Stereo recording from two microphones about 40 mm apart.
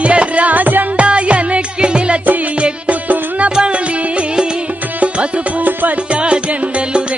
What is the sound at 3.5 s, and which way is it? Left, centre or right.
Music, centre.